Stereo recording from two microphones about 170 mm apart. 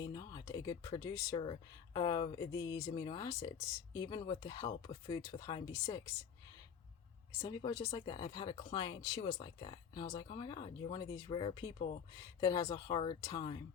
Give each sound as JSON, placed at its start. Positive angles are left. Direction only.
{"t": 0.0, "sound": "speech", "side_deg": 25}
{"t": 7.3, "sound": "speech", "side_deg": 25}